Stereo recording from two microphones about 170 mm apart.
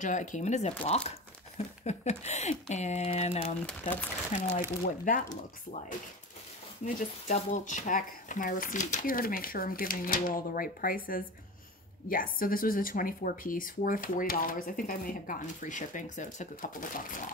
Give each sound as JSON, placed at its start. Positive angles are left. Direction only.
{"t": 0.0, "sound": "speech", "side_deg": 45}
{"t": 4.3, "sound": "speech", "side_deg": 50}
{"t": 6.8, "sound": "speech", "side_deg": 45}